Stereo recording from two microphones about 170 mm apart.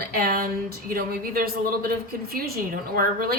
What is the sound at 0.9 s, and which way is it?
Speech, 60° right (ahead or behind).